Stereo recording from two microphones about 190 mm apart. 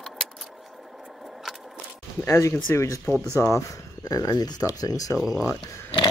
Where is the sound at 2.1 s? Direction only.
15° left (ahead or behind).